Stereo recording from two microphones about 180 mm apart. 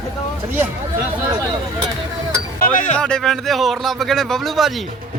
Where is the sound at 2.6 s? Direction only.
45° left (ahead or behind).